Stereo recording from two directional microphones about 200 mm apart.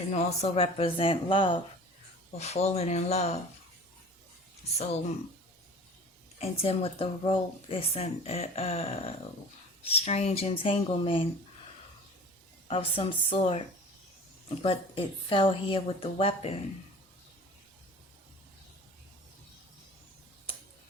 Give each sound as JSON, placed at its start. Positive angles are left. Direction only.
{"t": 0.1, "sound": "speech", "side_deg": 35}
{"t": 6.4, "sound": "speech", "side_deg": 30}
{"t": 12.6, "sound": "speech", "side_deg": 25}